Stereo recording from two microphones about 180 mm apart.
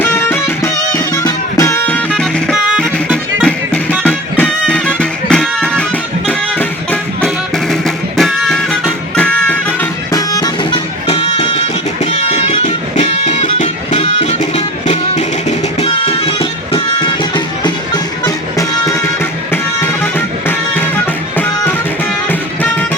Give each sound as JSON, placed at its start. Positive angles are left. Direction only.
{"t": 0.0, "sound": "music", "side_deg": 15}
{"t": 2.0, "sound": "music", "side_deg": 0}
{"t": 10.1, "sound": "music", "side_deg": 20}
{"t": 19.8, "sound": "music", "side_deg": 10}